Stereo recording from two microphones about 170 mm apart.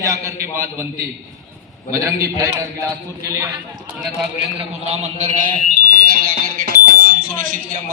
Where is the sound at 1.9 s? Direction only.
20° right (ahead or behind).